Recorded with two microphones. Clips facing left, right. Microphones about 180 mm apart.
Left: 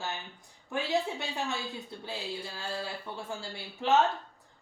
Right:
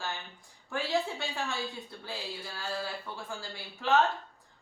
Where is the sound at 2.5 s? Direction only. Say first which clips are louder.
Even; 25° left (ahead or behind).